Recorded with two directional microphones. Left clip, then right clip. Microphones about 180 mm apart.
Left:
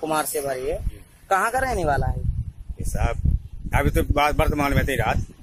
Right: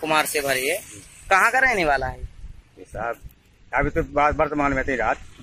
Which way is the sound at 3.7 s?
15° left (ahead or behind).